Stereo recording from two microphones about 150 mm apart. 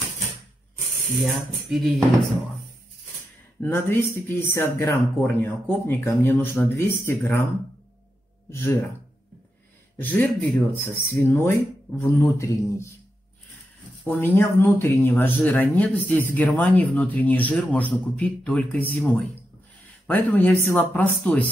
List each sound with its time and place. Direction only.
1.2 s tambourine: centre (ahead or behind)
3.6 s speech: 15° left (ahead or behind)
8.5 s speech: 15° left (ahead or behind)
9.9 s speech: 10° left (ahead or behind)
14.0 s speech: 15° left (ahead or behind)